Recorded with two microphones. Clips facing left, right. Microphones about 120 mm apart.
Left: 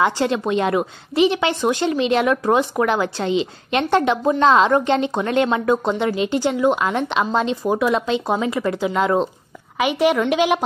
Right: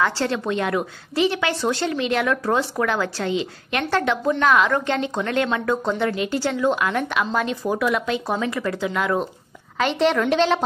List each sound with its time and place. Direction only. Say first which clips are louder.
0.0 s a woman's voice: left 3 dB; 15° left (ahead or behind)
9.8 s a woman's voice: left 2 dB; 10° left (ahead or behind)